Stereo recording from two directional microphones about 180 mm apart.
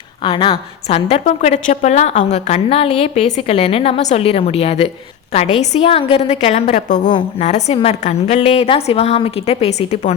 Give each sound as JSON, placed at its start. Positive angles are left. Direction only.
{"t": 0.2, "sound": "a woman's voice", "side_deg": 30}